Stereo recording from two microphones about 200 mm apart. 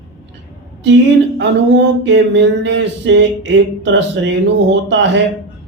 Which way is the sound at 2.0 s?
60° right (ahead or behind).